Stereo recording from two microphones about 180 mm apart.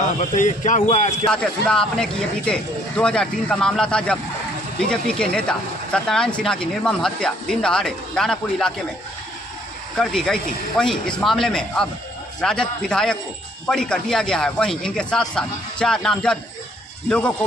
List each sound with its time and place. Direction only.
0.2 s speech: 45° left (ahead or behind)
1.3 s speech: 5° left (ahead or behind)
9.9 s speech: centre (ahead or behind)